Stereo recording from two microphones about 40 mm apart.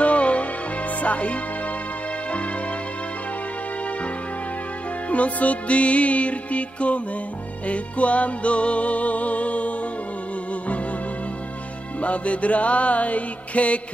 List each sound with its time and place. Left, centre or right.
0.0 s music: left
5.1 s music: left
12.0 s music: left